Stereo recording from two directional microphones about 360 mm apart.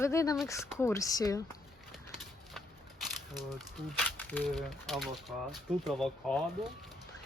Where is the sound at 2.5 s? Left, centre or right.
Centre.